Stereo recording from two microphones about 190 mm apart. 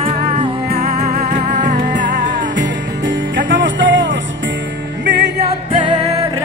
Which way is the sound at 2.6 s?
70° right (ahead or behind).